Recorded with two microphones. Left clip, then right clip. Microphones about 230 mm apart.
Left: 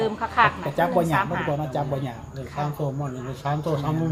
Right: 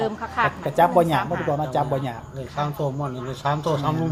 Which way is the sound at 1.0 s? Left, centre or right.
Right.